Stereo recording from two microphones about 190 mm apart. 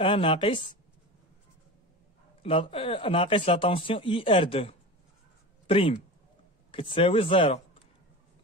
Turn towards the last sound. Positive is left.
turn(degrees=30)  # may be behind; listen again after turning